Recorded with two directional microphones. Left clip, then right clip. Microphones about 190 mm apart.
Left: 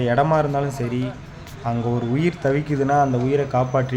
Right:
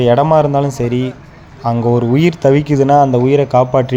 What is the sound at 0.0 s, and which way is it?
Speech, 35° right (ahead or behind).